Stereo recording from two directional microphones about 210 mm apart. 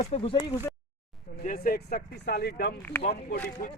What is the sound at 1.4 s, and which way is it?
Speech, 40° left (ahead or behind).